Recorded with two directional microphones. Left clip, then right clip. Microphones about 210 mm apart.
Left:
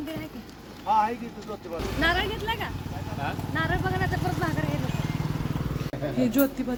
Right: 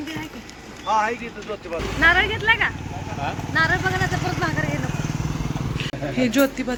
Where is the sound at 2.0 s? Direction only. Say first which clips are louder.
Right 9 dB; 20° left (ahead or behind).